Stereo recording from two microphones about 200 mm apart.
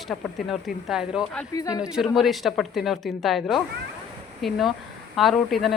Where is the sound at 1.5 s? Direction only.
20° left (ahead or behind).